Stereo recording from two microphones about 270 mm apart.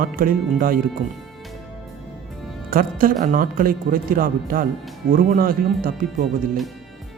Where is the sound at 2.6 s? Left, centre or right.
Right.